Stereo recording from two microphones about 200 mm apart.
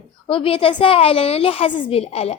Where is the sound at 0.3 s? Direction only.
25° left (ahead or behind).